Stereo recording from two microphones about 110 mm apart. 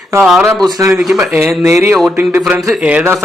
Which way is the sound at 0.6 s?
35° right (ahead or behind).